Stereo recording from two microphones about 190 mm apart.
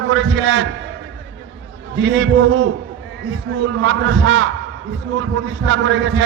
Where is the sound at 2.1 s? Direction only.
90° right.